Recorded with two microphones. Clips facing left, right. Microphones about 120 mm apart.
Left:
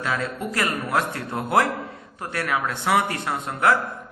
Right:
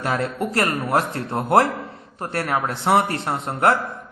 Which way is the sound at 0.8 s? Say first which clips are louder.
Right 3 dB; 30° right (ahead or behind).